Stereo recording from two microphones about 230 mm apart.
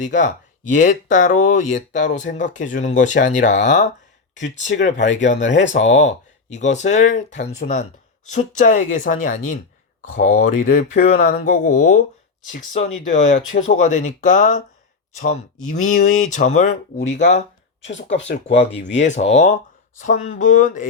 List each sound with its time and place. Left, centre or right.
0.0 s speech: left
4.8 s speech: left
5.8 s speech: left
13.1 s speech: left
18.2 s speech: left
18.9 s speech: left